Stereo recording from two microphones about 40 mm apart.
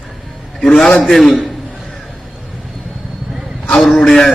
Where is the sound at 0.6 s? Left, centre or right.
Centre.